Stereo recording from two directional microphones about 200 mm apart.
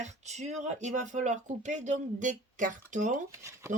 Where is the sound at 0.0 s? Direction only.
35° right (ahead or behind).